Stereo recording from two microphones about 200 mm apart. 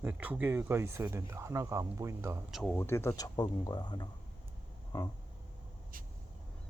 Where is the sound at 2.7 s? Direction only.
10° left (ahead or behind).